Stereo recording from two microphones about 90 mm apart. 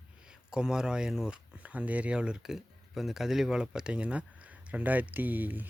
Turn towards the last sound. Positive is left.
turn(degrees=-20)  # may be behind; listen again after turning